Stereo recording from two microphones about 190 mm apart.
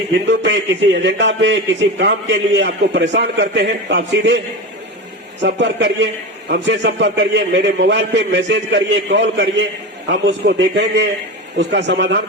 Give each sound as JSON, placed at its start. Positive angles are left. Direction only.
{"t": 0.3, "sound": "a man's voice", "side_deg": -70}
{"t": 5.4, "sound": "a man's voice", "side_deg": -70}